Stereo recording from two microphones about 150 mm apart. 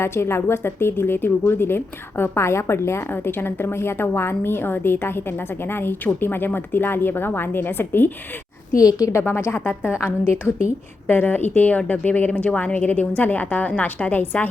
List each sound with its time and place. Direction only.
0.0 s a woman's voice: 15° left (ahead or behind)
11.1 s a woman's voice: 10° left (ahead or behind)